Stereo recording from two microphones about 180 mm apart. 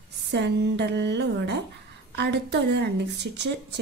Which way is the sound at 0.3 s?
75° right (ahead or behind).